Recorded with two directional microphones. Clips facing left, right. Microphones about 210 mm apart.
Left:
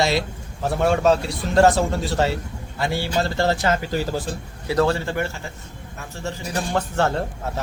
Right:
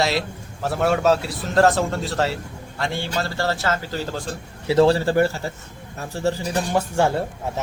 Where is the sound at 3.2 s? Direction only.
20° left (ahead or behind).